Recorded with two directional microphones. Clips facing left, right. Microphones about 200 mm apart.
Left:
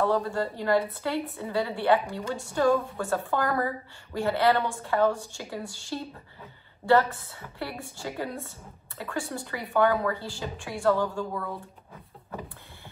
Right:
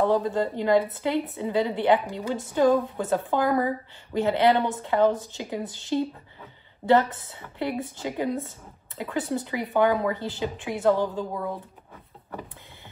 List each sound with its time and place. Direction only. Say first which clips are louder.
0.0 s speech: right 3 dB; 20° right (ahead or behind)